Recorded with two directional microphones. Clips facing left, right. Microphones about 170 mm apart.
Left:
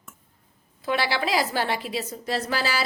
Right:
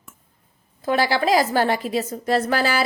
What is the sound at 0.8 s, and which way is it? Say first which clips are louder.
A woman's voice: right 6 dB; 45° right (ahead or behind).